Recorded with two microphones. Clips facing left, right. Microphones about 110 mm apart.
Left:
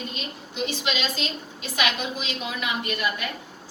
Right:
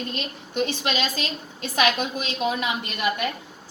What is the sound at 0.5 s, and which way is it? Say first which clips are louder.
A woman's voice: right 3 dB; 50° right (ahead or behind).